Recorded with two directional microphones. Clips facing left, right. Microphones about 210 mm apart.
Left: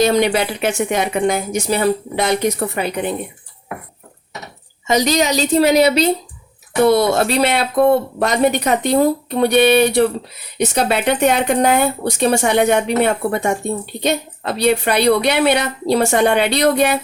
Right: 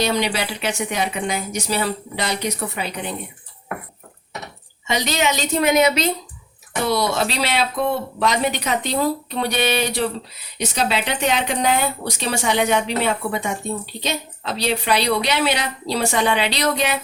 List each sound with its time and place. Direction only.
0.0 s speech: 50° left (ahead or behind)
4.9 s a woman's voice: 40° left (ahead or behind)
6.8 s speech: 55° left (ahead or behind)